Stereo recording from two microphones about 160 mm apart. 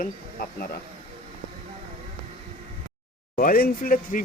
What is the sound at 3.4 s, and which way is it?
Speech, 65° left (ahead or behind).